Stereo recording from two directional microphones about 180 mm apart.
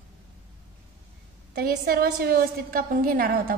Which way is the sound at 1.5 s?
55° right (ahead or behind).